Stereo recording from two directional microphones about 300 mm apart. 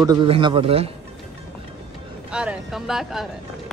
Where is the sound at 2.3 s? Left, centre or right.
Centre.